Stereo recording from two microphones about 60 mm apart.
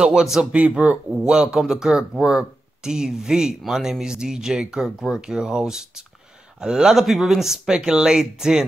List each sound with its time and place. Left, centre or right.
0.0 s speech: centre
0.5 s speech: right
1.3 s speech: centre